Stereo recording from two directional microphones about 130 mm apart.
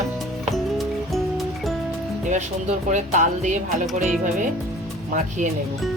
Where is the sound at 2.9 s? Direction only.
70° right (ahead or behind).